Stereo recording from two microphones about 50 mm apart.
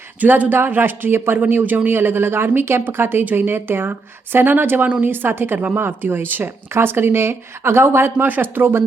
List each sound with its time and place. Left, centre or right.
0.2 s speech: right
5.1 s speech: right
8.3 s speech: right